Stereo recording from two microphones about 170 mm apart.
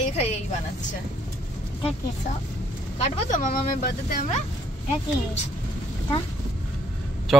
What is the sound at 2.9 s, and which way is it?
Speech, 45° left (ahead or behind).